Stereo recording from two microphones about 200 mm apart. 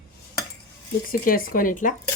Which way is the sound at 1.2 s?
45° left (ahead or behind).